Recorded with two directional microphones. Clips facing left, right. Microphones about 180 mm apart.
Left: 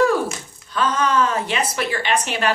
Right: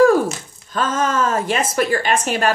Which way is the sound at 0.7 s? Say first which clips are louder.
Even; 45° right (ahead or behind).